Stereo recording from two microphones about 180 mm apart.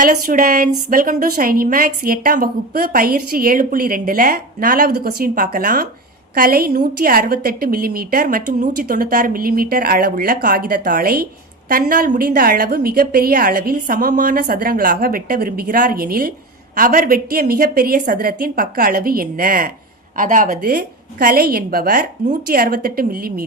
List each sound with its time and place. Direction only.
0.0 s a woman's voice: 50° right (ahead or behind)